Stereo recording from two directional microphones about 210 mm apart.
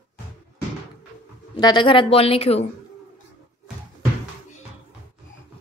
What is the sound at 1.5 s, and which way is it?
A woman's voice, 20° left (ahead or behind).